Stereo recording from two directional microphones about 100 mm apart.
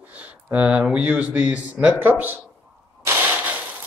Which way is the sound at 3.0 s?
15° right (ahead or behind).